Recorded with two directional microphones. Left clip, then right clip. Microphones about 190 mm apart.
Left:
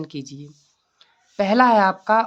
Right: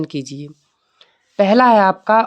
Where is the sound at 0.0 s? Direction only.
40° right (ahead or behind).